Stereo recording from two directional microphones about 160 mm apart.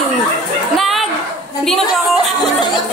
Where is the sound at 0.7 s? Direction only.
Centre (ahead or behind).